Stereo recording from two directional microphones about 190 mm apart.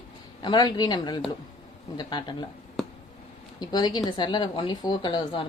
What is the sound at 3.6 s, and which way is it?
A woman's voice, 20° left (ahead or behind).